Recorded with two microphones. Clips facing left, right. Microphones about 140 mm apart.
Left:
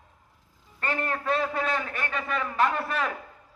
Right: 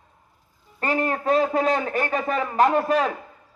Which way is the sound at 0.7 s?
40° right (ahead or behind).